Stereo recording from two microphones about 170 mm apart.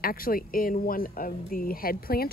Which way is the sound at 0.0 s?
60° left (ahead or behind).